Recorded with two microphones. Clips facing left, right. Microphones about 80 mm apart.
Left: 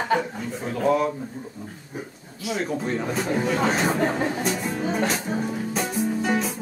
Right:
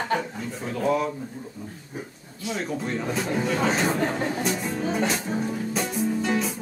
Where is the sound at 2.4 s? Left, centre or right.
Centre.